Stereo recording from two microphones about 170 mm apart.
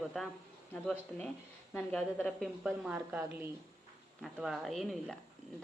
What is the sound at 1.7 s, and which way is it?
A woman's voice, 10° left (ahead or behind).